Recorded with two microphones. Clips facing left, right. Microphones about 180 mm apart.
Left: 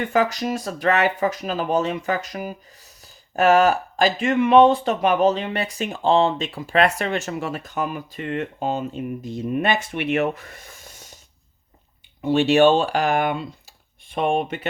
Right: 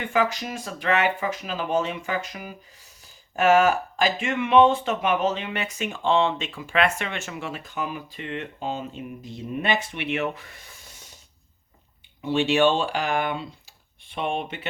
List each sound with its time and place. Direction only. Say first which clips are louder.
0.0 s speech: left 4 dB; 40° left (ahead or behind)
12.2 s speech: left 5 dB; 45° left (ahead or behind)